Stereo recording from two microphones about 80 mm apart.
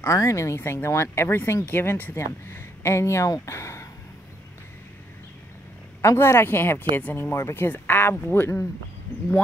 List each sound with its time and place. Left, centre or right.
0.0 s speech: left
6.0 s speech: left